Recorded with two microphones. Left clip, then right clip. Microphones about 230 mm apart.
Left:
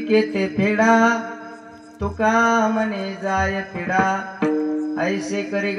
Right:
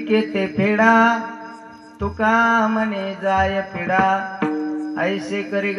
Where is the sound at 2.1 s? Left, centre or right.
Right.